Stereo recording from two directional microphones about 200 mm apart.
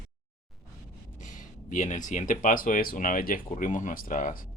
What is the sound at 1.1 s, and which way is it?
Speech, 40° left (ahead or behind).